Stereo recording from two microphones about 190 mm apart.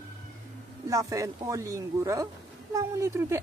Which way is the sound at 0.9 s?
15° right (ahead or behind).